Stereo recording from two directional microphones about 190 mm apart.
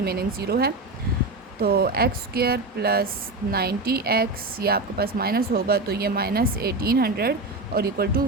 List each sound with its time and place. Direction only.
0.0 s a woman's voice: 55° right (ahead or behind)